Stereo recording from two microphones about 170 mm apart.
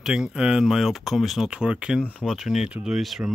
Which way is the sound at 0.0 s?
5° right (ahead or behind).